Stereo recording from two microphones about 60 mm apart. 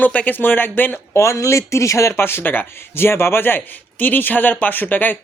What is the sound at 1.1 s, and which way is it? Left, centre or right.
Speech, left.